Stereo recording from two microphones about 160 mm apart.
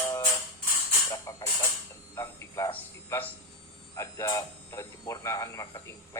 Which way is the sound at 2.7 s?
15° left (ahead or behind).